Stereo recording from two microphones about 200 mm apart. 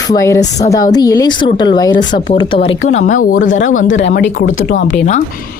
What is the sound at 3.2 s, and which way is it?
Speech, 45° left (ahead or behind).